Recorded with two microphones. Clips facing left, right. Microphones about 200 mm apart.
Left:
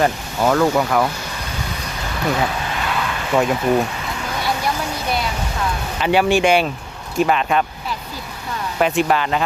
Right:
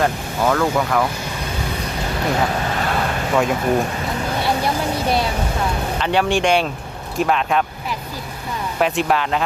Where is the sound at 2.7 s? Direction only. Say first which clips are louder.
Right 2 dB; 40° right (ahead or behind).